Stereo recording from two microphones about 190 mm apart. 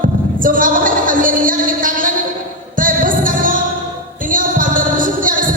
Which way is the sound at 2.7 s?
45° right (ahead or behind).